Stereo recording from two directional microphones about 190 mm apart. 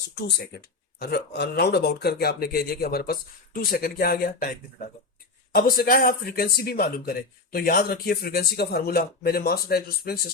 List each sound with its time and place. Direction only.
0.2 s speech: 60° left (ahead or behind)